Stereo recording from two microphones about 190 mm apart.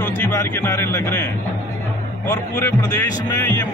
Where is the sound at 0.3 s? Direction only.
15° left (ahead or behind).